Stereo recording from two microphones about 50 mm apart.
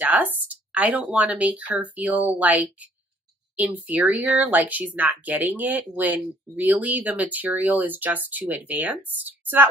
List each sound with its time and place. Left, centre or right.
0.0 s speech: right